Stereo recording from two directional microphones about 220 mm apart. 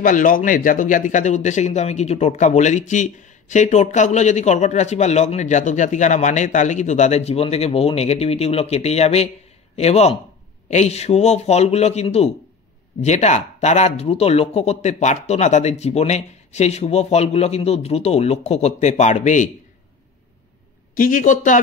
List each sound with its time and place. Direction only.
0.0 s a man's voice: 40° left (ahead or behind)
20.9 s speech: 40° left (ahead or behind)